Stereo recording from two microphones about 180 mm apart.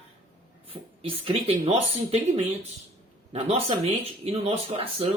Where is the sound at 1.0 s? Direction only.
30° right (ahead or behind).